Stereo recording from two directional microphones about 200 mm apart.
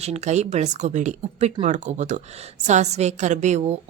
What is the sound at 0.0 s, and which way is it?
A woman's voice, 35° right (ahead or behind).